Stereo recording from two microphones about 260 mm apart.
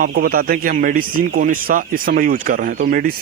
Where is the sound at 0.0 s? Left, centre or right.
Right.